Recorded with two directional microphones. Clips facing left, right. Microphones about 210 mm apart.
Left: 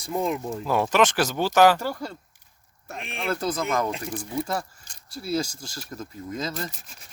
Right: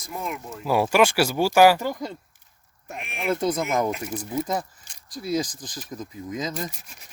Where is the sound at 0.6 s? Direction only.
10° right (ahead or behind).